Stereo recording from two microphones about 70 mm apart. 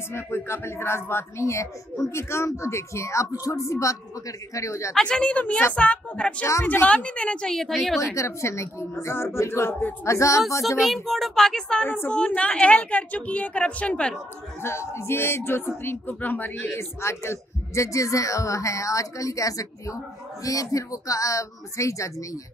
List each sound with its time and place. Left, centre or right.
0.5 s a man's voice: left
4.9 s a woman's voice: centre
8.0 s speech: left
10.0 s a man's voice: left
10.8 s a woman's voice: centre
14.6 s speech: left
16.7 s a man's voice: left